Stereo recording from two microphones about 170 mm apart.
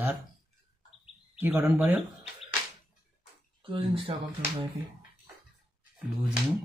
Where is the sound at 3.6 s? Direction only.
35° right (ahead or behind).